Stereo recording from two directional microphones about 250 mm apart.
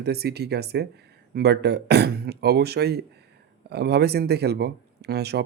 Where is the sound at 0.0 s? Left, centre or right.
Right.